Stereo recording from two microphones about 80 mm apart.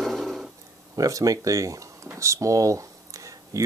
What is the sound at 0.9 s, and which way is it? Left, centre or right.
Speech, right.